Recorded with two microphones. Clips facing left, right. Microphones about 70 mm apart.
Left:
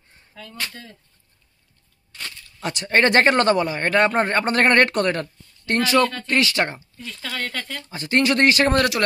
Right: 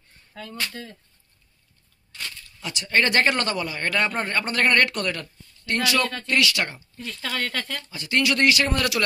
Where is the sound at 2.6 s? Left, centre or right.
Left.